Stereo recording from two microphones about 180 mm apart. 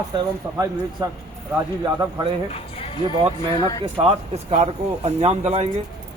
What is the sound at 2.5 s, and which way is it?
Music, 30° left (ahead or behind).